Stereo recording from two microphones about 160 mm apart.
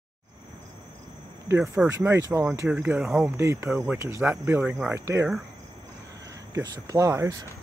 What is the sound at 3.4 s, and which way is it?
Speech, 20° right (ahead or behind).